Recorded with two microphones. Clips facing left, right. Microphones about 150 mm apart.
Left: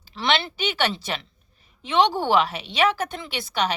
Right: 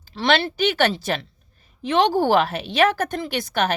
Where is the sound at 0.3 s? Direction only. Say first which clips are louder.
Right 5 dB; 45° right (ahead or behind).